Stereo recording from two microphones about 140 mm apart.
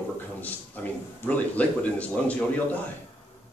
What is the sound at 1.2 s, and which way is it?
A man's voice, 10° left (ahead or behind).